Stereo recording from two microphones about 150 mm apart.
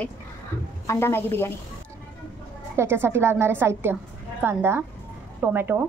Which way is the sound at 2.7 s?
15° right (ahead or behind).